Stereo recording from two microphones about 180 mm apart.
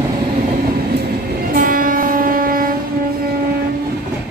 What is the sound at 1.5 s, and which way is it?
Train, 50° right (ahead or behind).